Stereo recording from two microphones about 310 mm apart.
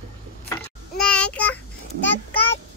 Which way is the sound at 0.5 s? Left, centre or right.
Centre.